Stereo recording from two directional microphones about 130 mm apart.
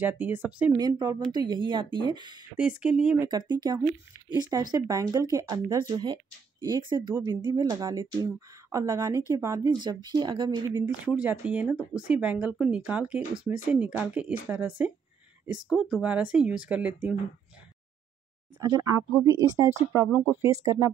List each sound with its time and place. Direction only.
0.0 s speech: 15° right (ahead or behind)
0.7 s speech: 35° right (ahead or behind)
2.5 s speech: 10° right (ahead or behind)
3.2 s speech: 30° right (ahead or behind)
7.7 s speech: 20° right (ahead or behind)
10.0 s speech: 35° right (ahead or behind)
10.9 s speech: 10° right (ahead or behind)
18.6 s speech: 25° right (ahead or behind)
20.1 s speech: 10° right (ahead or behind)